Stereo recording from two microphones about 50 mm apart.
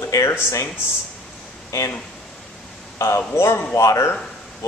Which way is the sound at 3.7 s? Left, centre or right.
Left.